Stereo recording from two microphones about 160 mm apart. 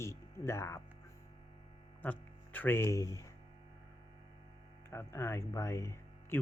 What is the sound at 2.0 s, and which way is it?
Speech, 10° left (ahead or behind).